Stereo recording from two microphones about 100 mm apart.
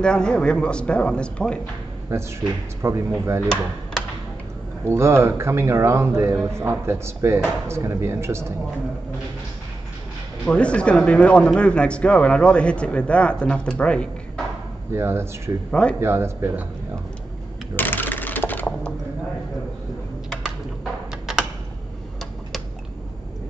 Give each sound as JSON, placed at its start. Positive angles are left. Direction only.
{"t": 0.0, "sound": "speech", "side_deg": 10}
{"t": 2.1, "sound": "speech", "side_deg": -25}
{"t": 4.8, "sound": "speech", "side_deg": -25}
{"t": 10.4, "sound": "speech", "side_deg": 10}
{"t": 15.0, "sound": "speech", "side_deg": -25}
{"t": 15.7, "sound": "speech", "side_deg": 10}
{"t": 16.0, "sound": "speech", "side_deg": -25}
{"t": 17.7, "sound": "computer keyboard", "side_deg": 20}
{"t": 21.3, "sound": "tick-tock", "side_deg": -5}